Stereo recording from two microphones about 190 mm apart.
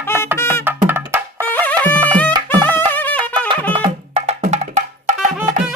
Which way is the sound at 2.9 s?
10° left (ahead or behind).